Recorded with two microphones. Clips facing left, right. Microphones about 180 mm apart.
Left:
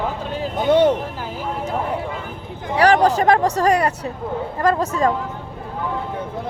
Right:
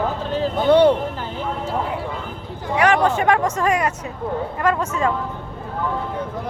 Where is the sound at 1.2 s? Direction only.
5° left (ahead or behind).